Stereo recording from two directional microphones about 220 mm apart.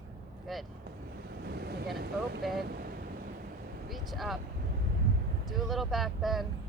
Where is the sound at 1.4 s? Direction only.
45° right (ahead or behind).